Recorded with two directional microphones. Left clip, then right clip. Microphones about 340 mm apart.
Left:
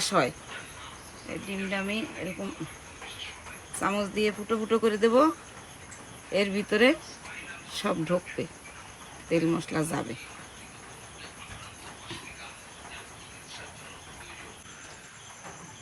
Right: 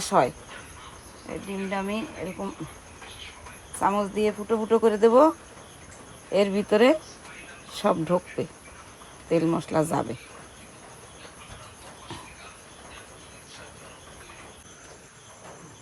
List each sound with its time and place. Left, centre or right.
0.0 s speech: right
3.8 s speech: right
6.3 s speech: right